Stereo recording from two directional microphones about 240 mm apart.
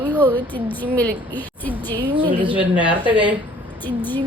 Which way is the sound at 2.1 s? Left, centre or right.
Right.